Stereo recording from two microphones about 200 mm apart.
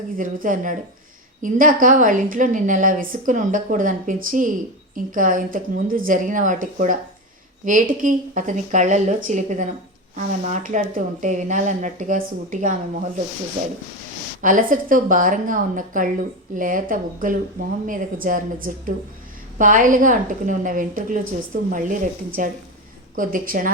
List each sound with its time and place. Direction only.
0.2 s a woman's voice: 40° right (ahead or behind)
14.4 s a woman's voice: 40° right (ahead or behind)